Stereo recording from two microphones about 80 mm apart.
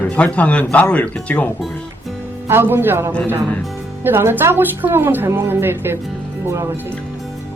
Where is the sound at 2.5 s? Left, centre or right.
Right.